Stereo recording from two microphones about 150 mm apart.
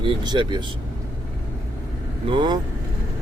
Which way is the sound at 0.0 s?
30° right (ahead or behind).